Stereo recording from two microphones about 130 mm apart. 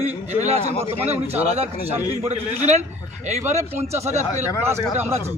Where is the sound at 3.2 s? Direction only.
65° right (ahead or behind).